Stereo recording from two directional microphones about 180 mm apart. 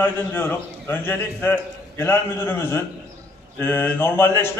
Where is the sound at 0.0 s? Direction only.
10° left (ahead or behind).